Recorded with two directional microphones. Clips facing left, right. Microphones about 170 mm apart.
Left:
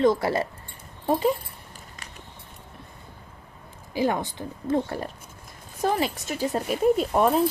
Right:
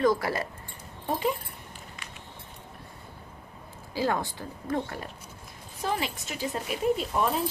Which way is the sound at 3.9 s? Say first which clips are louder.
Left 3 dB; 20° left (ahead or behind).